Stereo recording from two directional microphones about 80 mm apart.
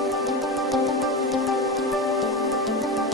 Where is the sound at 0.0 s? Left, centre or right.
Centre.